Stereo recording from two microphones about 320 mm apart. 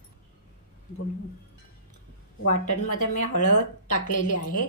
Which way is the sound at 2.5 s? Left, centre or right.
Left.